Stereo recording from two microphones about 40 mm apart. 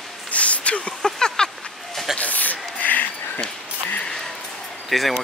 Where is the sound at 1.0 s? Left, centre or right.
Centre.